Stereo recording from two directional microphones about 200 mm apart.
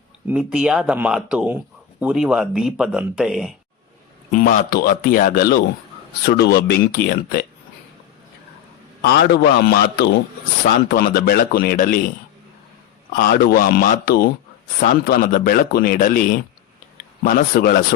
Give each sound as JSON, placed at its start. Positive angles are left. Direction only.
{"t": 0.3, "sound": "speech", "side_deg": -5}
{"t": 4.3, "sound": "a man's voice", "side_deg": 40}
{"t": 9.0, "sound": "a man's voice", "side_deg": 55}
{"t": 13.1, "sound": "a man's voice", "side_deg": 50}